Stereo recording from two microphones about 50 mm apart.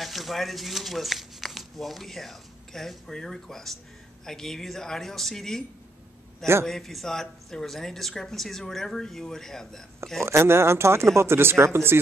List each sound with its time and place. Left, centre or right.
0.0 s speech: centre
6.6 s speech: centre
10.2 s speech: right